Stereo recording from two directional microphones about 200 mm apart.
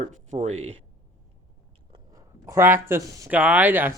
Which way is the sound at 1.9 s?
15° right (ahead or behind).